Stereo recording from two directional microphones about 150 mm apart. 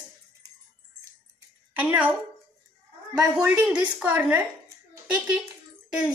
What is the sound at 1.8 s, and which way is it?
Speech, 10° right (ahead or behind).